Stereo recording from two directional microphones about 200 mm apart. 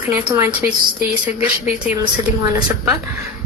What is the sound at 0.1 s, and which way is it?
Speech, 10° right (ahead or behind).